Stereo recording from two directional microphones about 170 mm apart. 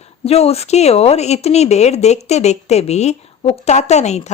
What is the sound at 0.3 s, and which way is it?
Speech, 35° left (ahead or behind).